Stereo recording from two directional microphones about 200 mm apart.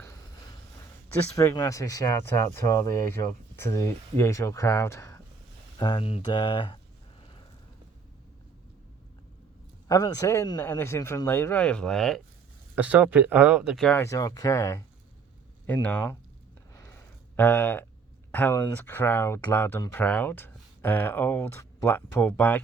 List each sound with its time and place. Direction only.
1.4 s speech: 15° left (ahead or behind)
5.8 s speech: 25° left (ahead or behind)
9.9 s speech: 15° left (ahead or behind)
14.0 s speech: 15° left (ahead or behind)
16.7 s a sound: 10° left (ahead or behind)
18.3 s speech: 10° left (ahead or behind)